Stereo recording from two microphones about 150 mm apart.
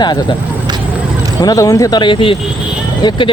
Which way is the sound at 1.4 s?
25° left (ahead or behind).